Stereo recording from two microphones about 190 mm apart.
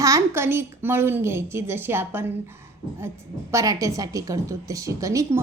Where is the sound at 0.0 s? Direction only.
15° right (ahead or behind).